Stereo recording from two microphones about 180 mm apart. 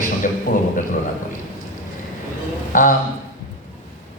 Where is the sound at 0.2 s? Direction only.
50° left (ahead or behind).